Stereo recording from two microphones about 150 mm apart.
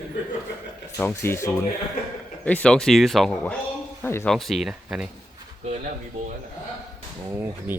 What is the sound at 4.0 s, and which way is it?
Speech, 15° left (ahead or behind).